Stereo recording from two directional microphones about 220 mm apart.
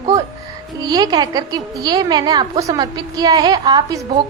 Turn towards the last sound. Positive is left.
turn(degrees=-20)  # may be behind; listen again after turning